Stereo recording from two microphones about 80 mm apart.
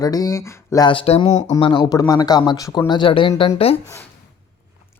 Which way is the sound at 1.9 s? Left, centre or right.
Left.